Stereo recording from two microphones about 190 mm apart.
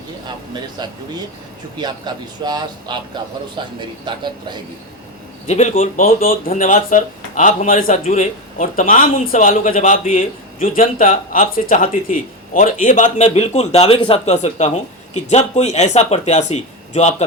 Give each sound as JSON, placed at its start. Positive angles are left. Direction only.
{"t": 1.8, "sound": "a man's voice", "side_deg": -20}
{"t": 5.5, "sound": "speech", "side_deg": 40}